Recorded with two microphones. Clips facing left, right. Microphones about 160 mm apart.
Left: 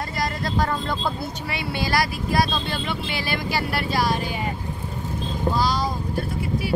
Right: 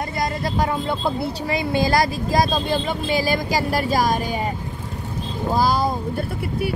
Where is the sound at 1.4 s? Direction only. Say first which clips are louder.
Right 7 dB; 40° right (ahead or behind).